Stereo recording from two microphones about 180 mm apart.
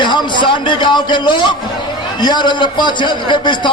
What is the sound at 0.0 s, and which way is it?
A man's voice, 25° left (ahead or behind).